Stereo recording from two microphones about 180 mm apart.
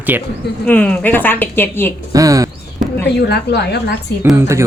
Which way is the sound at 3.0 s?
65° left (ahead or behind).